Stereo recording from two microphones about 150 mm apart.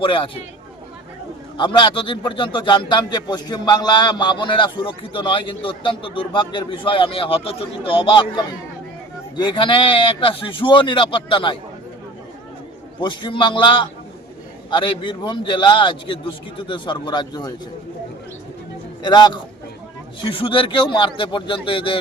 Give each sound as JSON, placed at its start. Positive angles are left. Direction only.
{"t": 0.0, "sound": "a man's voice", "side_deg": 35}
{"t": 1.5, "sound": "a man's voice", "side_deg": 30}
{"t": 13.0, "sound": "a man's voice", "side_deg": 30}
{"t": 19.0, "sound": "a man's voice", "side_deg": 30}